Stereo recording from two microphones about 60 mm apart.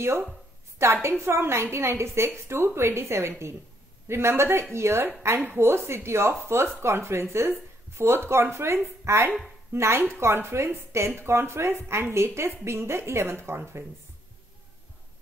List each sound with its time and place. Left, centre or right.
0.8 s a woman's voice: right